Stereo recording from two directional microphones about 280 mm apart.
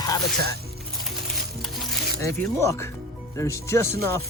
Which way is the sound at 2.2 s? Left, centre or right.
Centre.